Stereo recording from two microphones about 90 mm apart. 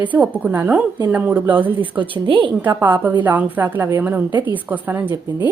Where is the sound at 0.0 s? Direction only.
15° right (ahead or behind).